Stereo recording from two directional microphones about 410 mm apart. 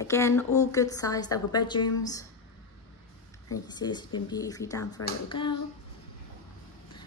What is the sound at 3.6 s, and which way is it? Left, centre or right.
A woman's voice, centre.